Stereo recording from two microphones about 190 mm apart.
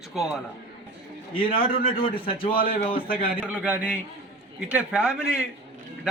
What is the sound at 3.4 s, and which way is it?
A man's voice, 10° right (ahead or behind).